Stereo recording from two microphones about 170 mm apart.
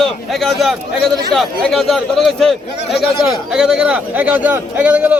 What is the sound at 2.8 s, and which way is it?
Speech, 80° left.